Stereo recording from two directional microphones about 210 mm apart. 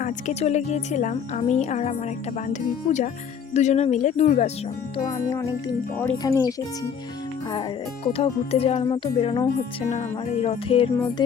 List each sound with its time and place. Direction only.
0.0 s a woman's voice: 35° left (ahead or behind)
5.1 s speech: 15° left (ahead or behind)
8.0 s speech: 25° left (ahead or behind)